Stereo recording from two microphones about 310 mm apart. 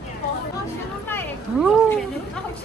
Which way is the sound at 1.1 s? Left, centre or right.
Centre.